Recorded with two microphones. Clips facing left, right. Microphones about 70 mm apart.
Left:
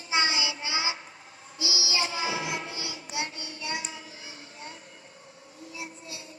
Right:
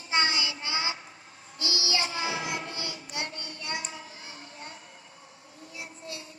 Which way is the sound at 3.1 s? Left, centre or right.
Right.